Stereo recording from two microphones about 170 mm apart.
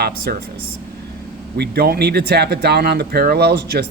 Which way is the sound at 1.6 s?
65° right (ahead or behind).